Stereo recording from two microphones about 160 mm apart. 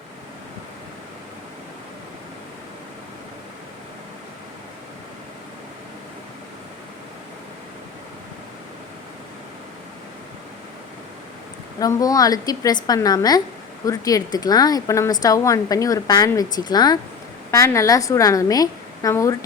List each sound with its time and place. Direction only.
11.8 s a woman's voice: 20° left (ahead or behind)